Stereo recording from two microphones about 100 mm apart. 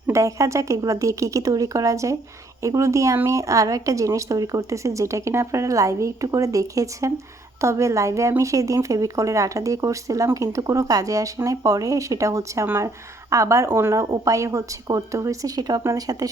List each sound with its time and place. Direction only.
0.1 s a woman's voice: 30° right (ahead or behind)